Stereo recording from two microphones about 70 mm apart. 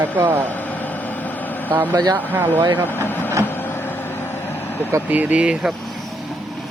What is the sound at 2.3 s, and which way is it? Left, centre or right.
Speech, right.